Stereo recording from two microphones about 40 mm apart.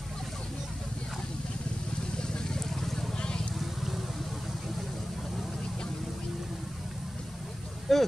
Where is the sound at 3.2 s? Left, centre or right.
Left.